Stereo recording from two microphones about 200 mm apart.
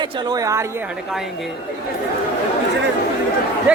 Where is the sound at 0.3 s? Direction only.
15° right (ahead or behind).